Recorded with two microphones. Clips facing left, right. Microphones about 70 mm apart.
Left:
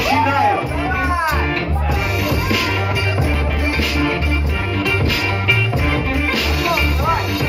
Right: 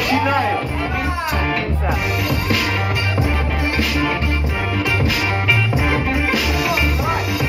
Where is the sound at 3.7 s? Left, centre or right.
Centre.